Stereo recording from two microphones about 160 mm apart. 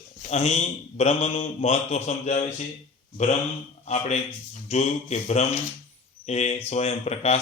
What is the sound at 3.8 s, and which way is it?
Speech, 40° left (ahead or behind).